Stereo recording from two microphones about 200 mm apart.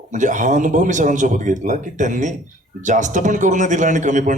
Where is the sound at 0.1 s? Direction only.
40° right (ahead or behind).